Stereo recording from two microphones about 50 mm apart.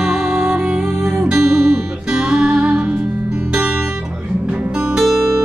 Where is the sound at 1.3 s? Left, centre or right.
Right.